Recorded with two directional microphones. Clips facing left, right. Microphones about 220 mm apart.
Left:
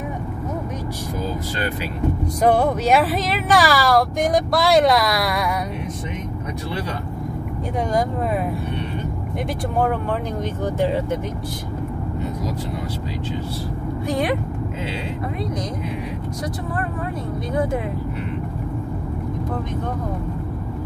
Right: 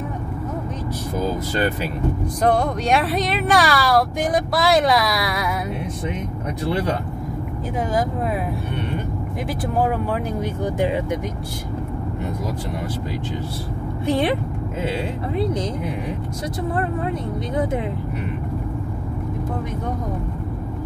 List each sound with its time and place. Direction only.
2.4 s speech: 5° left (ahead or behind)
10.4 s speech: 15° right (ahead or behind)
14.0 s speech: 25° right (ahead or behind)